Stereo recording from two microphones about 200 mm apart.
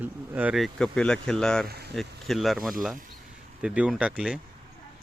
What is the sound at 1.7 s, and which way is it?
Speech, 55° right (ahead or behind).